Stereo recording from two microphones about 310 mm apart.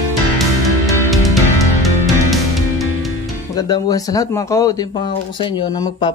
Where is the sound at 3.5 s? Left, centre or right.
Centre.